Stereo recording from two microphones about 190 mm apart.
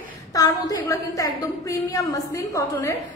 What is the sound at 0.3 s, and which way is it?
A woman's voice, 20° left (ahead or behind).